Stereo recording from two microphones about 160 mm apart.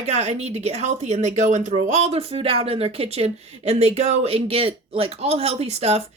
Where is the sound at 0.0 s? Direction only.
40° right (ahead or behind).